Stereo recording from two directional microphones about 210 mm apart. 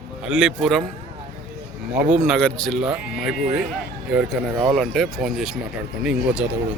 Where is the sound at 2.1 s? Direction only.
Centre (ahead or behind).